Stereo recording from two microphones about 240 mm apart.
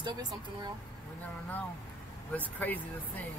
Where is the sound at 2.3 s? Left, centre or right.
Centre.